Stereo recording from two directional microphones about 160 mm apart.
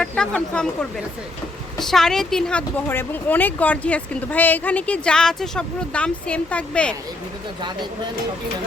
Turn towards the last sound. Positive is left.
turn(degrees=-25)  # may be behind; listen again after turning